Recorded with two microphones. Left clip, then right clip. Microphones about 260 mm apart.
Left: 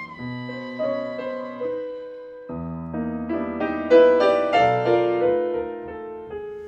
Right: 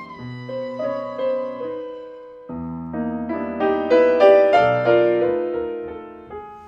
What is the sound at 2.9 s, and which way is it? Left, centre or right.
Electric piano, right.